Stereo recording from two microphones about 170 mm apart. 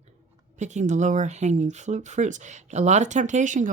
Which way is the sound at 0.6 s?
45° right (ahead or behind).